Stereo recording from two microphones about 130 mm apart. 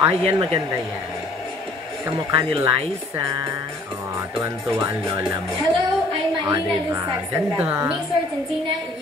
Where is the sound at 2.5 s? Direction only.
50° right (ahead or behind).